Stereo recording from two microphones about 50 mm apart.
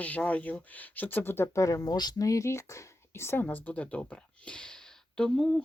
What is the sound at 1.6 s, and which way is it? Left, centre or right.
Speech, left.